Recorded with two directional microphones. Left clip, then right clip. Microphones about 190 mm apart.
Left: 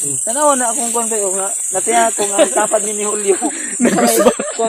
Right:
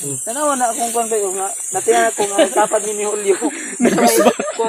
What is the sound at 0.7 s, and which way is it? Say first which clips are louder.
Speech: right 1 dB; 65° left (ahead or behind).